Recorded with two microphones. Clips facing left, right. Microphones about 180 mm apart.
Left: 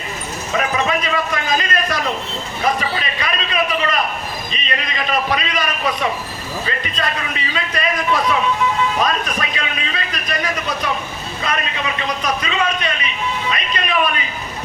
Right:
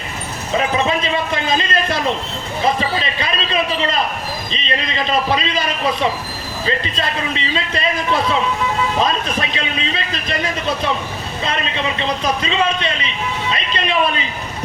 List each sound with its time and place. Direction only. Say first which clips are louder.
0.5 s a man's voice: right 2 dB; 30° right (ahead or behind)